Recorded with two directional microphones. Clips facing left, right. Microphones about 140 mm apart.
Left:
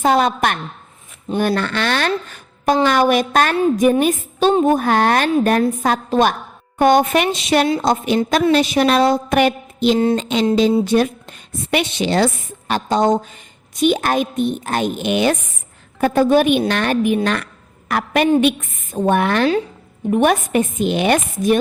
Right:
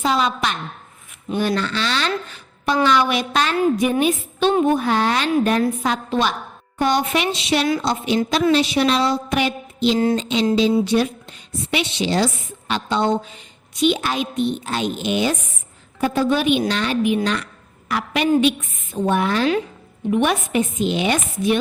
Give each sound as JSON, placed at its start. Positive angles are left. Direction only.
{"t": 0.0, "sound": "a woman's voice", "side_deg": 50}
{"t": 16.0, "sound": "a woman's voice", "side_deg": 50}
{"t": 17.2, "sound": "a sound", "side_deg": 55}
{"t": 18.9, "sound": "a woman's voice", "side_deg": 55}
{"t": 20.1, "sound": "a woman's voice", "side_deg": 45}